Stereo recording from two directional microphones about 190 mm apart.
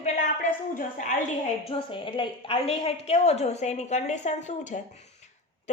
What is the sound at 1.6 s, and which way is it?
A woman's voice, 30° left (ahead or behind).